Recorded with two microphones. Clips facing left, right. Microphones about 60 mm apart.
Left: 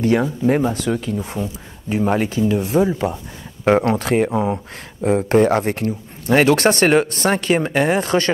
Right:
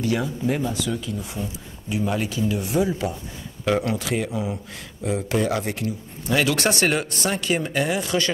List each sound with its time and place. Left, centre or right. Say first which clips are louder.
0.0 s speech: left 7 dB; left